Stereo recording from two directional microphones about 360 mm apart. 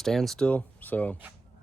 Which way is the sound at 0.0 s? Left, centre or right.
Centre.